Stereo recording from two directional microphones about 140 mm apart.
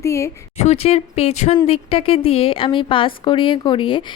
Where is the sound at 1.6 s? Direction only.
40° left (ahead or behind).